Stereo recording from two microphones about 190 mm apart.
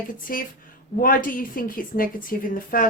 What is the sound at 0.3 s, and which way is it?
Speech, 50° left (ahead or behind).